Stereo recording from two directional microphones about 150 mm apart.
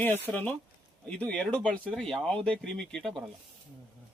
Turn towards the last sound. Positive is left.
turn(degrees=5)  # may be behind; listen again after turning